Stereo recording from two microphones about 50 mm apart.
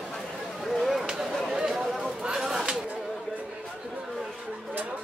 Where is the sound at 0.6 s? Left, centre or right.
Centre.